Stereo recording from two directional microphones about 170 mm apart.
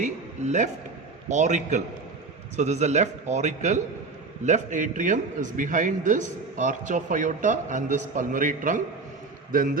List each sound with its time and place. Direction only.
0.0 s a man's voice: 45° right (ahead or behind)